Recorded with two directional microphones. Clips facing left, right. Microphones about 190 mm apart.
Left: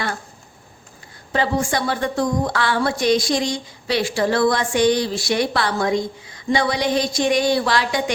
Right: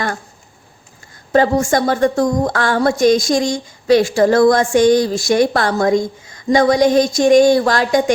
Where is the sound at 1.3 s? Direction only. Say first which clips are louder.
Right 7 dB; 45° right (ahead or behind).